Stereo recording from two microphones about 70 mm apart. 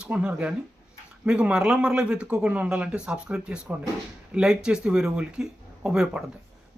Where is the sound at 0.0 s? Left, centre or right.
Centre.